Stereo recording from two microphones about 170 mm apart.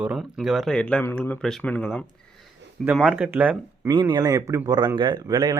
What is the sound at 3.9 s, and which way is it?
A man's voice, 25° right (ahead or behind).